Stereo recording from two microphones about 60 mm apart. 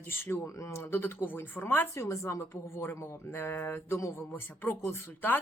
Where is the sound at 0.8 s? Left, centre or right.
Left.